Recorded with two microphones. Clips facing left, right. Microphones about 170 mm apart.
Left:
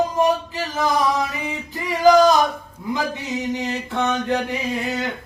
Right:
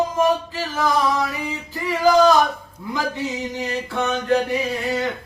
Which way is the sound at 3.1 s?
20° left (ahead or behind).